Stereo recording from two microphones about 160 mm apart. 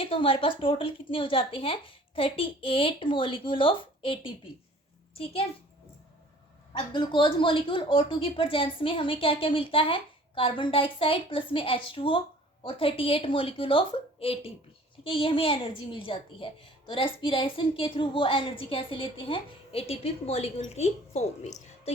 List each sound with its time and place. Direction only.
0.0 s a woman's voice: 35° left (ahead or behind)
6.7 s a woman's voice: 30° left (ahead or behind)